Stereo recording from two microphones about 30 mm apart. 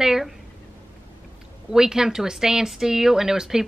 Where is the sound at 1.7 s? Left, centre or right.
Centre.